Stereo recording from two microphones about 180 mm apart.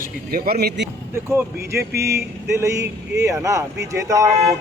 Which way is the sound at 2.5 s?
15° right (ahead or behind).